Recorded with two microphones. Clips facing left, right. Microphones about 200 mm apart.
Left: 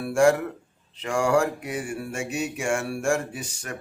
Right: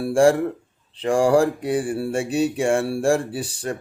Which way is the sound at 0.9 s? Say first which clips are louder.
Right 5 dB; 30° right (ahead or behind).